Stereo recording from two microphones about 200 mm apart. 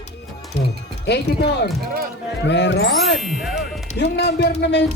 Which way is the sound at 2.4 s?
60° left (ahead or behind).